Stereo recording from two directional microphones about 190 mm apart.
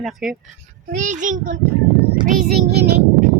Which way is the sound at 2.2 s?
50° right (ahead or behind).